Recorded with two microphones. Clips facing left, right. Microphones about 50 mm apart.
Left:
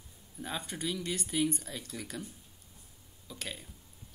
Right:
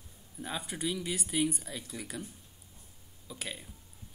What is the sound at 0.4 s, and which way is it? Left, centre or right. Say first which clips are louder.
Speech: right 1 dB; centre.